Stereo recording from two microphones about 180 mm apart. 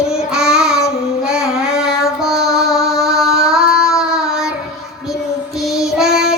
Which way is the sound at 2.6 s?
Centre (ahead or behind).